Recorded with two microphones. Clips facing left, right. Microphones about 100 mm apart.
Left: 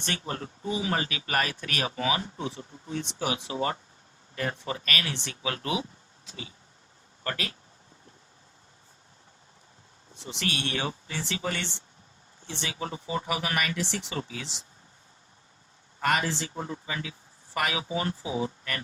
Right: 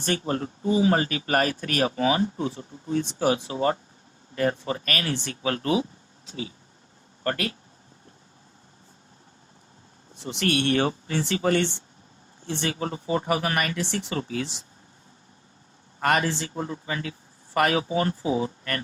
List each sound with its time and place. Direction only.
0.0 s speech: 40° right (ahead or behind)
7.3 s speech: 50° right (ahead or behind)
10.2 s speech: 55° right (ahead or behind)
16.0 s speech: 50° right (ahead or behind)